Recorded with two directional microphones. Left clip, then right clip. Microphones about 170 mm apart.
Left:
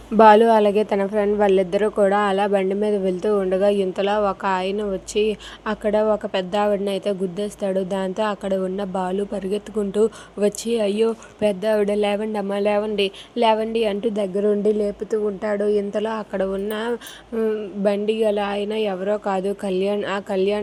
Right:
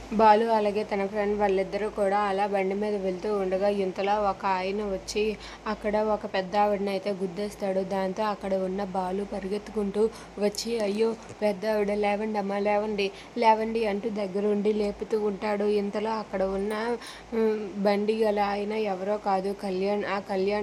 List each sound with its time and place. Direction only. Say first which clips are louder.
0.2 s a woman's voice: left 8 dB; 35° left (ahead or behind)
17.3 s speech: left 3 dB; 5° left (ahead or behind)
17.8 s a woman's voice: left 5 dB; 15° left (ahead or behind)